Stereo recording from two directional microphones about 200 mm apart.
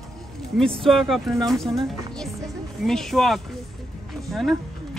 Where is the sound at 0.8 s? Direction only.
Centre (ahead or behind).